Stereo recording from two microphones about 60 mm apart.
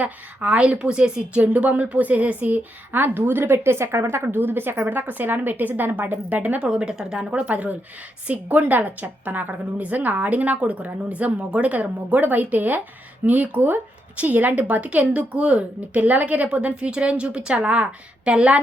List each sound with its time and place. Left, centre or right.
0.0 s a woman's voice: right
6.6 s speech: centre
7.3 s a woman's voice: right